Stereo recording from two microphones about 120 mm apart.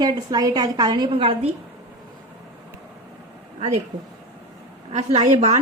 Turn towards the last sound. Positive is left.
turn(degrees=-80)